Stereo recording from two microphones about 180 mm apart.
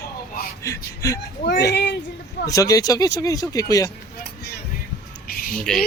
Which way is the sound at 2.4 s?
20° left (ahead or behind).